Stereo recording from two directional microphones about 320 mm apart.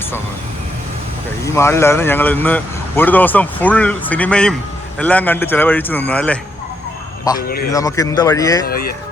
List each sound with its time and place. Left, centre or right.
1.5 s speech: centre
7.3 s speech: left
7.7 s speech: centre
8.6 s speech: left